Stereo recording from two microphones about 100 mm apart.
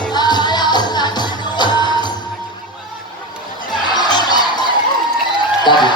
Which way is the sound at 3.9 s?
45° left (ahead or behind).